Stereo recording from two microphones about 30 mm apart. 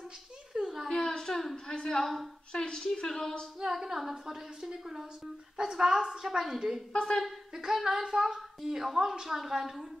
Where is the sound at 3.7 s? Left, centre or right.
Centre.